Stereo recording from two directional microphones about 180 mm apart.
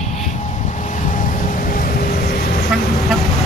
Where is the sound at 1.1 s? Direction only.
50° left (ahead or behind).